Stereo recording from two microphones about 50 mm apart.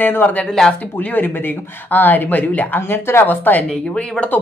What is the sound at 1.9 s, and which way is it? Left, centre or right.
Speech, left.